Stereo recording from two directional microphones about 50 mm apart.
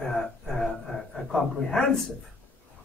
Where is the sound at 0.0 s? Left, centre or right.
Centre.